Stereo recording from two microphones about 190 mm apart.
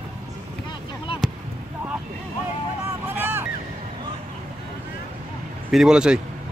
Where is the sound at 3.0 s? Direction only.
10° right (ahead or behind).